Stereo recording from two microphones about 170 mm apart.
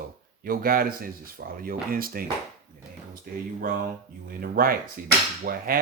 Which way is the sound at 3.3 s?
55° right (ahead or behind).